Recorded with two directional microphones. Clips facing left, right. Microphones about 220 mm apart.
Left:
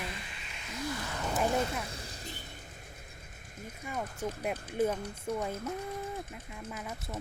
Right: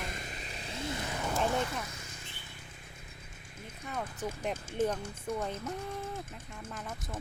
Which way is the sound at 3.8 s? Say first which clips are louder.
Left 1 dB; 10° left (ahead or behind).